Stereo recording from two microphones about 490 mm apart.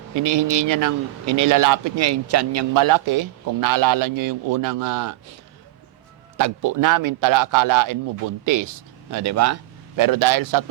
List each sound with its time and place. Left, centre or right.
0.1 s speech: right
6.3 s speech: right
10.0 s speech: right